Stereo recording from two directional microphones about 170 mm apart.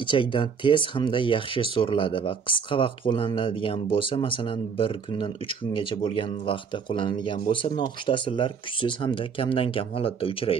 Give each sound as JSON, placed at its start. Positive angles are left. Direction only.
{"t": 0.0, "sound": "speech", "side_deg": 30}